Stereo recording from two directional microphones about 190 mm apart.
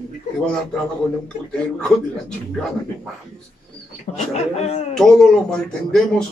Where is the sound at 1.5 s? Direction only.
5° left (ahead or behind).